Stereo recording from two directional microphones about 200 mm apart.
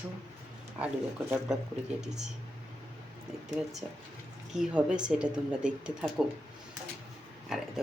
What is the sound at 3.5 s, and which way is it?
Speech, centre (ahead or behind).